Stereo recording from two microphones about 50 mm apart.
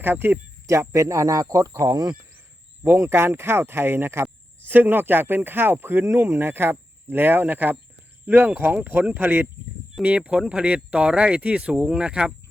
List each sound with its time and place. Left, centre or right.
0.0 s speech: right
0.7 s speech: right
2.8 s speech: right
4.7 s speech: right
10.0 s speech: right